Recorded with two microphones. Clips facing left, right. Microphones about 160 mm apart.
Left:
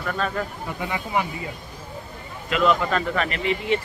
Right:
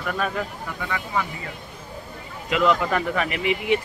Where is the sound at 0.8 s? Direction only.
20° left (ahead or behind).